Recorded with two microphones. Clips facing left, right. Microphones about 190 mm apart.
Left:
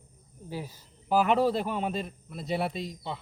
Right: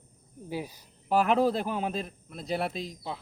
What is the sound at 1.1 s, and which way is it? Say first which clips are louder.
Speech: even; centre (ahead or behind).